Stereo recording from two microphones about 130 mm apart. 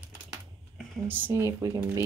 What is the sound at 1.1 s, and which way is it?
Speech, 15° right (ahead or behind).